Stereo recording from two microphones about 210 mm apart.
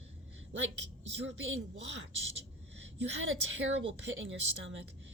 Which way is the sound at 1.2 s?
60° right (ahead or behind).